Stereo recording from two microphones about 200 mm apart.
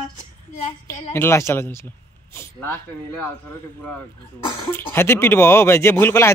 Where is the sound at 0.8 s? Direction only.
15° left (ahead or behind).